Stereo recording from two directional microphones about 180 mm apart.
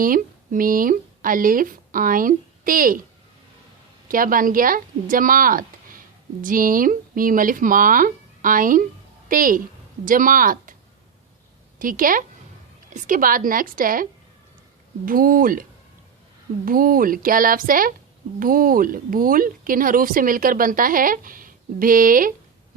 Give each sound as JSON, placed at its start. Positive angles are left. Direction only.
{"t": 0.0, "sound": "speech", "side_deg": -50}
{"t": 4.1, "sound": "speech", "side_deg": -50}
{"t": 11.8, "sound": "speech", "side_deg": -50}
{"t": 16.6, "sound": "speech", "side_deg": -50}